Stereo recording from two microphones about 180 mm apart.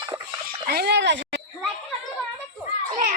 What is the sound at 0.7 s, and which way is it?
Speech, 65° right (ahead or behind).